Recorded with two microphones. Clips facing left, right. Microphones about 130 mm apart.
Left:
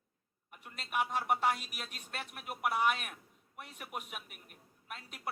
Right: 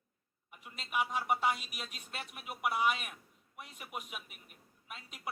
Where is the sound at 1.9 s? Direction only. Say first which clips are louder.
Left 1 dB; 55° left (ahead or behind).